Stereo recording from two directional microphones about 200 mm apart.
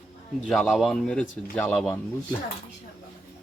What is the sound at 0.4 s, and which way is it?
Speech, 5° left (ahead or behind).